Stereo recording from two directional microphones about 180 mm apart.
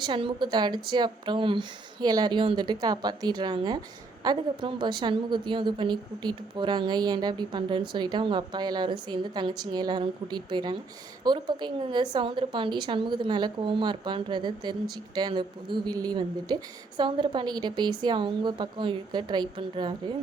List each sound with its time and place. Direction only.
0.0 s a woman's voice: 25° right (ahead or behind)